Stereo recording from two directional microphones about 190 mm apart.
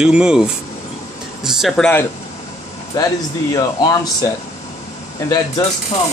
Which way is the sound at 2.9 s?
20° left (ahead or behind).